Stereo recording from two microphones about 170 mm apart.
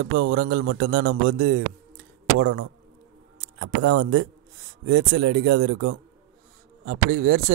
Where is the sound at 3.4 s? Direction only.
80° right.